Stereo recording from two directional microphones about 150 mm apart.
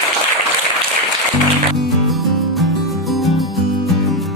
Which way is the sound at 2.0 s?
Centre (ahead or behind).